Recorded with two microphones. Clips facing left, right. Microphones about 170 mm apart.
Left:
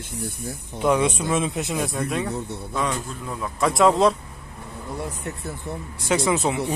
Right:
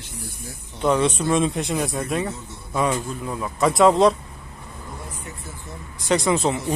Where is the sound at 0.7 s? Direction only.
10° left (ahead or behind).